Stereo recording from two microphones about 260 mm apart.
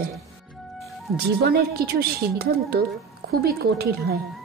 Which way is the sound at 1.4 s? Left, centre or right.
Right.